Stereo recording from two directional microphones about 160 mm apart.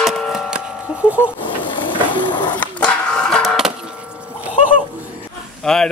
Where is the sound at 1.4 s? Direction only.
30° left (ahead or behind).